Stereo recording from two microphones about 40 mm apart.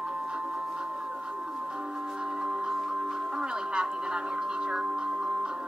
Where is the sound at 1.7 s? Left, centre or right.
Right.